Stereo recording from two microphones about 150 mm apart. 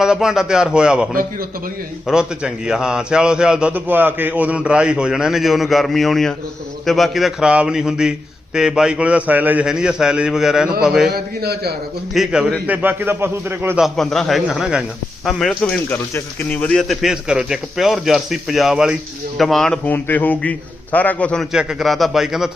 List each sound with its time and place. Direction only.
0.0 s a man's voice: 5° right (ahead or behind)
1.1 s a man's voice: 70° right (ahead or behind)
2.0 s a man's voice: 5° right (ahead or behind)
11.1 s a man's voice: 90° right
12.1 s a man's voice: 5° right (ahead or behind)
13.7 s a man's voice: centre (ahead or behind)
21.5 s a man's voice: 5° right (ahead or behind)